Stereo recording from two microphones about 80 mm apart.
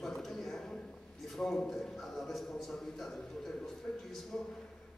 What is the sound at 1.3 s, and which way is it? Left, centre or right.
A man's voice, centre.